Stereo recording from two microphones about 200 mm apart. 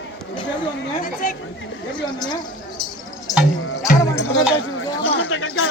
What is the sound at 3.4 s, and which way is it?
Music, 45° left (ahead or behind).